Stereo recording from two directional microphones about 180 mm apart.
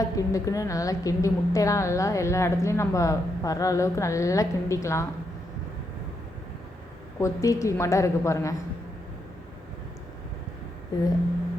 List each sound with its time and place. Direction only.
0.0 s a woman's voice: 20° left (ahead or behind)
7.2 s a woman's voice: 15° left (ahead or behind)
10.9 s a sound: 20° left (ahead or behind)